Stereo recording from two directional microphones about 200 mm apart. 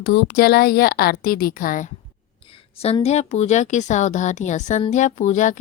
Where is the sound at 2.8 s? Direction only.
30° left (ahead or behind).